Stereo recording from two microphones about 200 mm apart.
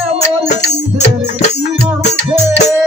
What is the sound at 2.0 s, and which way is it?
Music, 35° left (ahead or behind).